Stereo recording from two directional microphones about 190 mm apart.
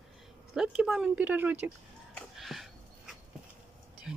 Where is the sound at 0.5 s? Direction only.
5° right (ahead or behind).